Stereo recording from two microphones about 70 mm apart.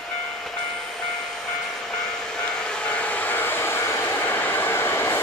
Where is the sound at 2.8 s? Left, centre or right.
Centre.